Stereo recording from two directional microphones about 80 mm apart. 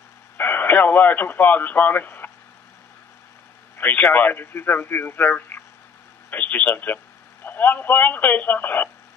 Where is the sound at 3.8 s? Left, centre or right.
Left.